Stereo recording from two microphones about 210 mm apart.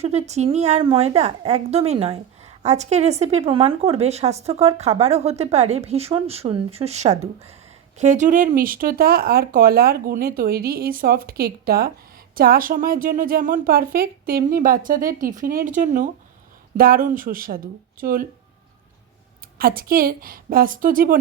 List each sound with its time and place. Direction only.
0.0 s a woman's voice: 30° right (ahead or behind)
19.5 s speech: 45° right (ahead or behind)